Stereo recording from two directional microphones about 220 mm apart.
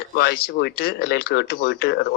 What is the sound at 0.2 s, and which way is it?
A man's voice, 45° left (ahead or behind).